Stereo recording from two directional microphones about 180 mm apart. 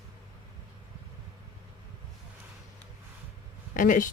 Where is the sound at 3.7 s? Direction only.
45° left (ahead or behind).